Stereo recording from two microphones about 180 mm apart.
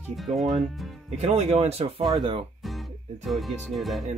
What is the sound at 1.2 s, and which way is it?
Speech, 35° right (ahead or behind).